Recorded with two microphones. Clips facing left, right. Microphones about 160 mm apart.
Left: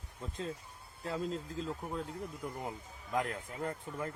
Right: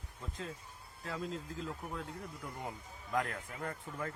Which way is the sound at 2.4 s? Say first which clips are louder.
Left 3 dB; 25° left (ahead or behind).